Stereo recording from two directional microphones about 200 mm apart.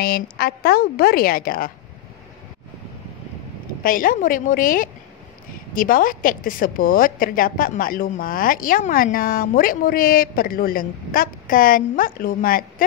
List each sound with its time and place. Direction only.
0.0 s a woman's voice: 50° left (ahead or behind)
3.8 s a woman's voice: 45° left (ahead or behind)